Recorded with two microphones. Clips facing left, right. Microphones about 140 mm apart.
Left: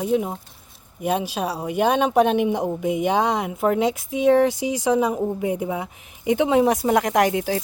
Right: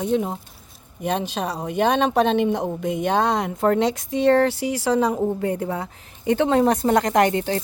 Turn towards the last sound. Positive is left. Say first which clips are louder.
# right 1 dB
turn(degrees=5)  # may be behind; listen again after turning